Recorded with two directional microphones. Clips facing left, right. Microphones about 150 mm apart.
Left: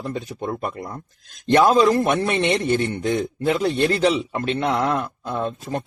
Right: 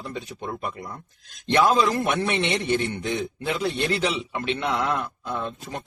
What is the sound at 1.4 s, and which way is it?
A man's voice, 45° left (ahead or behind).